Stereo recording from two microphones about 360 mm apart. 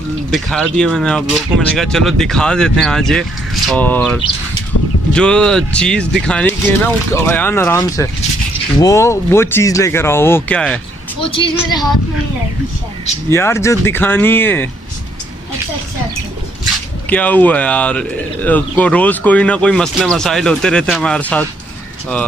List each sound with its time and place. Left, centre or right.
0.3 s speech: centre
11.2 s speech: centre
13.3 s speech: centre
17.1 s speech: centre